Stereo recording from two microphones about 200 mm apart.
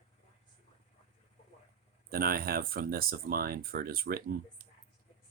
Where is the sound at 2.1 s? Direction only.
50° right (ahead or behind).